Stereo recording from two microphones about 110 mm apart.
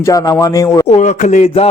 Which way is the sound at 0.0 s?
30° left (ahead or behind).